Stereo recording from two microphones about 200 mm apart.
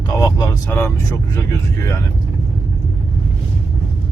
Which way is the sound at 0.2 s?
15° left (ahead or behind).